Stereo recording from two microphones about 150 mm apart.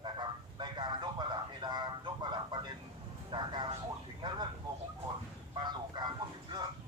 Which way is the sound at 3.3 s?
30° right (ahead or behind).